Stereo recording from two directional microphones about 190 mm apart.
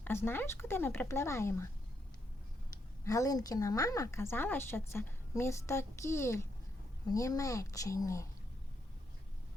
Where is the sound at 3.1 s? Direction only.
20° left (ahead or behind).